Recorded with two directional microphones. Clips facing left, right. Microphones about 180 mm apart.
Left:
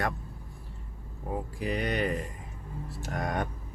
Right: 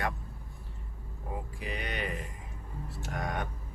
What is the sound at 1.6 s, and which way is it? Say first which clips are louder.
Speech: left 8 dB; 40° left (ahead or behind).